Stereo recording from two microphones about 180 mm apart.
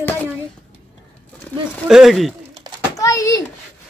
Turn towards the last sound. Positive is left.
turn(degrees=15)  # may be behind; listen again after turning